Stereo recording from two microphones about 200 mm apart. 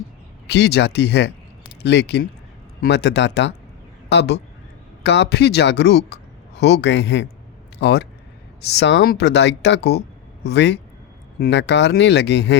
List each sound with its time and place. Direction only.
0.4 s speech: 55° left (ahead or behind)